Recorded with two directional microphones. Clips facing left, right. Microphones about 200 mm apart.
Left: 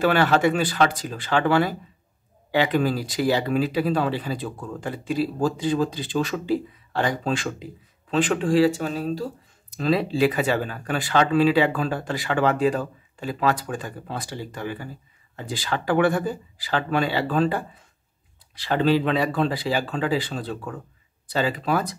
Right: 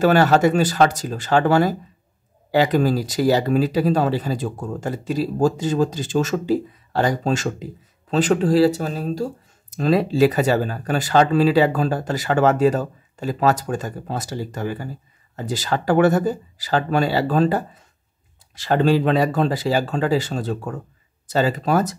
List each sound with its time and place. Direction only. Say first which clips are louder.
0.0 s speech: right 4 dB; 40° right (ahead or behind)